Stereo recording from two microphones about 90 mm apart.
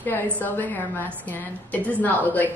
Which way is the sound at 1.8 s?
20° left (ahead or behind).